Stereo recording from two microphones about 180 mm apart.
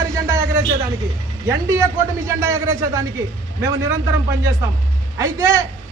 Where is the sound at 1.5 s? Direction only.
15° right (ahead or behind).